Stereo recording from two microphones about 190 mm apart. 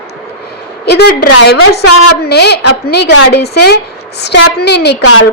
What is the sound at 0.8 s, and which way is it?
Speech, 55° left (ahead or behind).